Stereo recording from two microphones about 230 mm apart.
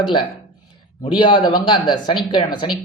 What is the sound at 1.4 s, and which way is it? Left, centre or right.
Speech, centre.